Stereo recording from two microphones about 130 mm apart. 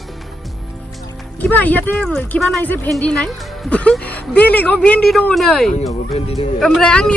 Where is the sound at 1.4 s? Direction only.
10° left (ahead or behind).